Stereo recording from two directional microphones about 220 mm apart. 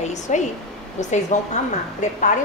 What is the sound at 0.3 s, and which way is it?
Speech, 35° left (ahead or behind).